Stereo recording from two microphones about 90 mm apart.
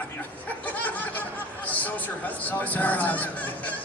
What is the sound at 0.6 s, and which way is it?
Speech, 20° left (ahead or behind).